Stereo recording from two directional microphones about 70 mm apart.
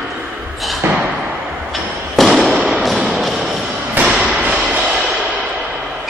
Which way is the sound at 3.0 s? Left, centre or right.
Centre.